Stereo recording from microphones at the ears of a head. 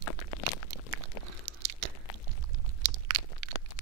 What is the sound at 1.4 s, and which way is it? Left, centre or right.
Biting, right.